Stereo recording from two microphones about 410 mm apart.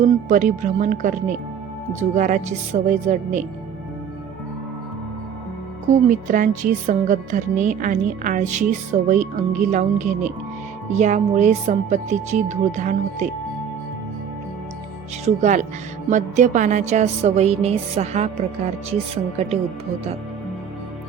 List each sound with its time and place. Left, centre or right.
0.0 s speech: centre
2.1 s speech: centre
6.1 s speech: centre
15.2 s speech: centre